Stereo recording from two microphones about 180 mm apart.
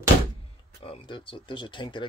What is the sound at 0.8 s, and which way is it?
Speech, 25° left (ahead or behind).